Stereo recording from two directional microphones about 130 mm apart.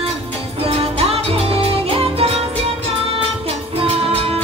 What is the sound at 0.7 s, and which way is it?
Music, 50° right (ahead or behind).